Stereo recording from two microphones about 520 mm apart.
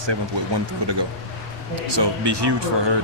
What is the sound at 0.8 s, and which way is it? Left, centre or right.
Speech, right.